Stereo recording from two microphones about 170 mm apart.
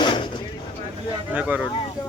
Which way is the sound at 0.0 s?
25° left (ahead or behind).